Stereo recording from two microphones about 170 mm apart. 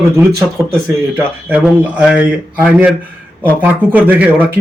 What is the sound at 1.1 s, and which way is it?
Speech, 10° right (ahead or behind).